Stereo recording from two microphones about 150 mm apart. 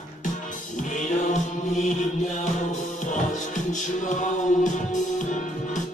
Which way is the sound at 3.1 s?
55° left (ahead or behind).